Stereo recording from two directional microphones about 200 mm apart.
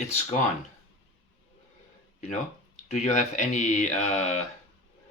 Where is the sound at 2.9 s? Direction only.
35° left (ahead or behind).